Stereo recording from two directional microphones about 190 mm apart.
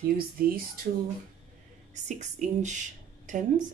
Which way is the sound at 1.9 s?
40° right (ahead or behind).